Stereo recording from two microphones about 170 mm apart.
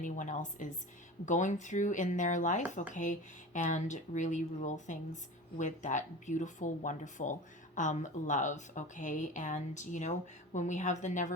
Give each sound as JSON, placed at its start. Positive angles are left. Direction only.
{"t": 0.0, "sound": "speech", "side_deg": 50}